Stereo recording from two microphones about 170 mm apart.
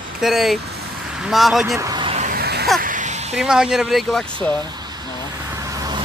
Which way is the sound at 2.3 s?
70° right (ahead or behind).